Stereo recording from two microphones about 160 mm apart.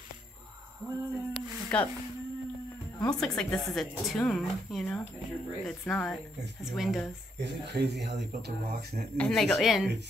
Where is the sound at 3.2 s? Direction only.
5° left (ahead or behind).